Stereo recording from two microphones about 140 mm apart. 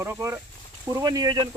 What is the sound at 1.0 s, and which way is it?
Speech, 30° right (ahead or behind).